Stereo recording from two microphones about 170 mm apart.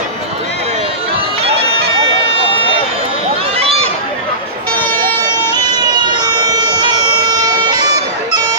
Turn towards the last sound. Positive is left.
turn(degrees=-25)  # may be behind; listen again after turning